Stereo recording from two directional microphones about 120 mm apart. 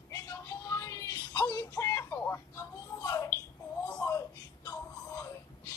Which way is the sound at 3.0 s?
30° left (ahead or behind).